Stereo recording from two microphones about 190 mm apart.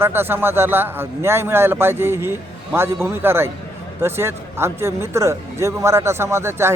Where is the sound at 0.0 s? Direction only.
10° right (ahead or behind).